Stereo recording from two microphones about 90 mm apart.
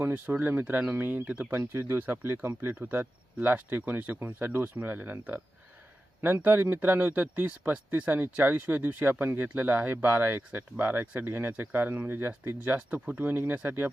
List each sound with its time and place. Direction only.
0.0 s speech: 20° right (ahead or behind)